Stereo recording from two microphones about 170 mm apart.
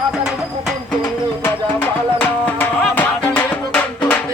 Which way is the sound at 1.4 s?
10° left (ahead or behind).